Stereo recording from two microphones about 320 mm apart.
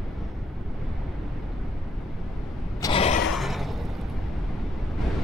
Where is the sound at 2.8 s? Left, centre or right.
Centre.